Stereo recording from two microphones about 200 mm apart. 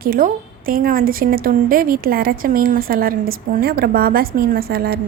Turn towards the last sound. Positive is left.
turn(degrees=-50)  # may be behind; listen again after turning